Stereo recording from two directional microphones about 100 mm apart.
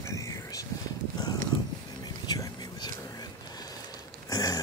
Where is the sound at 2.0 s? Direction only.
40° left (ahead or behind).